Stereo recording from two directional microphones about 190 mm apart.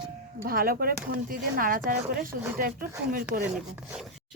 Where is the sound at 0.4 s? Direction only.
50° right (ahead or behind).